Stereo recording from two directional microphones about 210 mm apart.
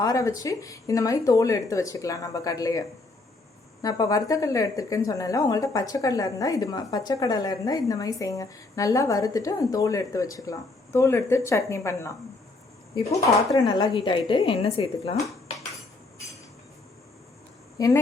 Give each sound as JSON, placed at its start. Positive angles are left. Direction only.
{"t": 0.0, "sound": "a woman's voice", "side_deg": 15}
{"t": 17.7, "sound": "speech", "side_deg": 15}